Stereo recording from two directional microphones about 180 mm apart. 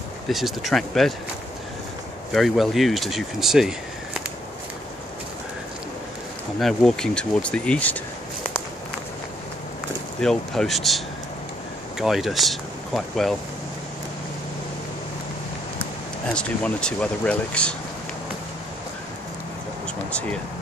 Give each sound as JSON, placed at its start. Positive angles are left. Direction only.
{"t": 0.3, "sound": "speech", "side_deg": 0}
{"t": 2.3, "sound": "speech", "side_deg": 0}
{"t": 6.6, "sound": "speech", "side_deg": 0}
{"t": 10.2, "sound": "speech", "side_deg": 0}
{"t": 12.0, "sound": "speech", "side_deg": 0}
{"t": 16.3, "sound": "speech", "side_deg": 5}
{"t": 20.1, "sound": "speech", "side_deg": 5}